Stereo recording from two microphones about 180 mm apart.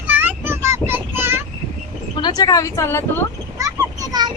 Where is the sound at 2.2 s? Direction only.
25° left (ahead or behind).